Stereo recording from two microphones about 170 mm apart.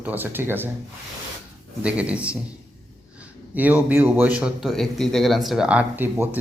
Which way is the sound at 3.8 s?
10° right (ahead or behind).